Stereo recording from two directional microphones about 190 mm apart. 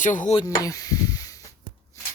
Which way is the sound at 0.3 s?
15° left (ahead or behind).